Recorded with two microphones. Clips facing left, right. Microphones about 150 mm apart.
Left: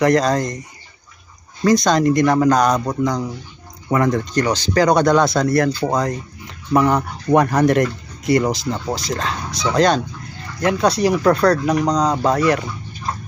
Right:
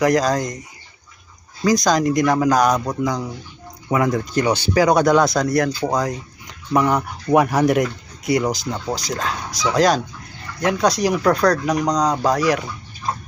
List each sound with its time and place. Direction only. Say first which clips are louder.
0.0 s speech: left 2 dB; centre (ahead or behind)
1.6 s speech: left 2 dB; centre (ahead or behind)